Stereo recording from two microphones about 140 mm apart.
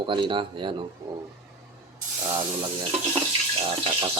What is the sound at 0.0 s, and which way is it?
Speech, 35° right (ahead or behind).